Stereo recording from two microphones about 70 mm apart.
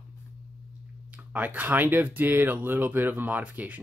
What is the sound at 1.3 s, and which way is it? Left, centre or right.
Speech, right.